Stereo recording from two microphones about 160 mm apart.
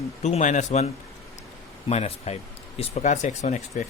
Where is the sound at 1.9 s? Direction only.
40° left (ahead or behind).